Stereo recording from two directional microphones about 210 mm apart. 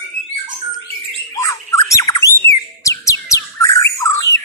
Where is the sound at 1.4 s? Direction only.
15° left (ahead or behind).